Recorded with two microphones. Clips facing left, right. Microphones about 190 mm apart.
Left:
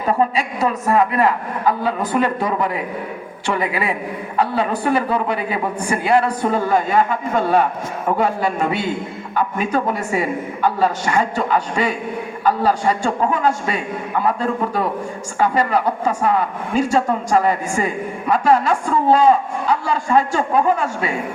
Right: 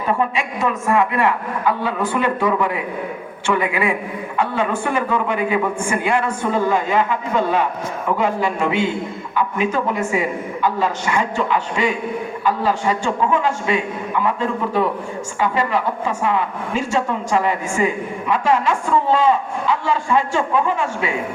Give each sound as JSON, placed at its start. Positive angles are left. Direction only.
{"t": 0.0, "sound": "a woman's voice", "side_deg": 35}